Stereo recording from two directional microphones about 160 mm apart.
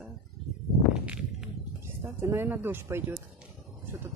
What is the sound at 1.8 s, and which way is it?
Speech, 15° right (ahead or behind).